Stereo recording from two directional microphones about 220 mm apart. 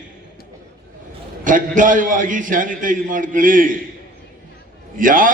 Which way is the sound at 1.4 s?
35° right (ahead or behind).